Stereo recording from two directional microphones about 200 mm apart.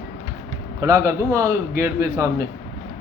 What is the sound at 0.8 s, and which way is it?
Speech, 15° right (ahead or behind).